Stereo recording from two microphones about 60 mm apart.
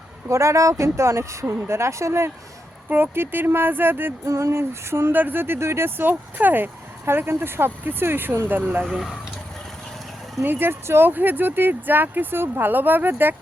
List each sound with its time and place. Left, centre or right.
0.3 s speech: right
2.9 s speech: right
4.3 s speech: right
8.8 s speech: centre
10.4 s speech: right